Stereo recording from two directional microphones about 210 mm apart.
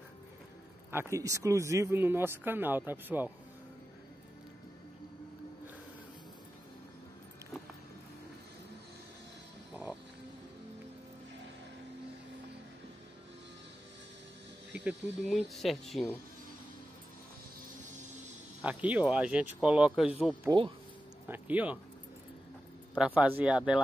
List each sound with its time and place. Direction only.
0.9 s speech: 15° right (ahead or behind)
14.7 s speech: 5° right (ahead or behind)
18.6 s speech: 5° right (ahead or behind)
20.4 s speech: 25° right (ahead or behind)
21.3 s speech: 5° right (ahead or behind)
22.9 s speech: 5° right (ahead or behind)